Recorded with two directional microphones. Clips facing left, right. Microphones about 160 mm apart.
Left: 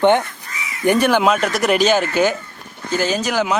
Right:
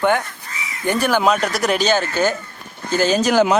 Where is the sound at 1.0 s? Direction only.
Centre (ahead or behind).